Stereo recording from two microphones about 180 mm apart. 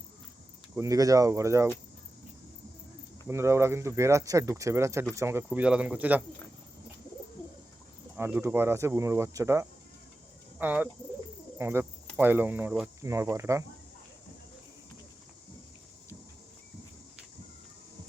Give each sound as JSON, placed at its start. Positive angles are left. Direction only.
{"t": 0.8, "sound": "speech", "side_deg": -20}
{"t": 3.2, "sound": "speech", "side_deg": -15}
{"t": 8.1, "sound": "speech", "side_deg": -15}